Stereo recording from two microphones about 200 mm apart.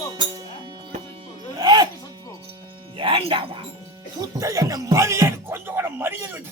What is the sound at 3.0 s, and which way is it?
Music, 25° right (ahead or behind).